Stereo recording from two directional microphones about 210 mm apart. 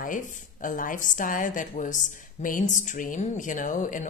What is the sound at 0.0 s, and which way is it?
Speech, 40° left (ahead or behind).